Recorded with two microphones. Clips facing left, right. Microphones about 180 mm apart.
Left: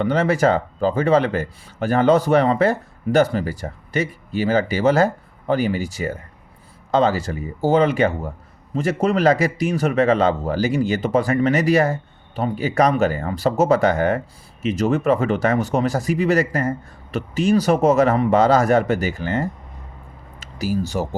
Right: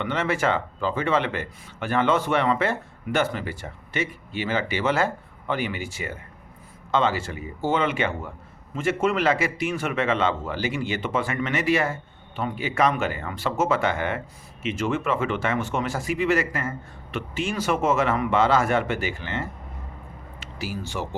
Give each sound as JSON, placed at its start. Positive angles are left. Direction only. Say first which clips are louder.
{"t": 0.0, "sound": "speech", "louder": "left 7 dB", "side_deg": 35}